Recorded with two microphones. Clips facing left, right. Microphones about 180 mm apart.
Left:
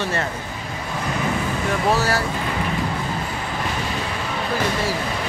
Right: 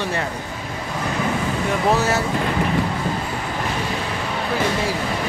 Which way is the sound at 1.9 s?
20° right (ahead or behind).